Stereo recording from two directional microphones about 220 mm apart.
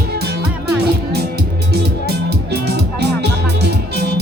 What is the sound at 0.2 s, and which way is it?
Music, 45° right (ahead or behind).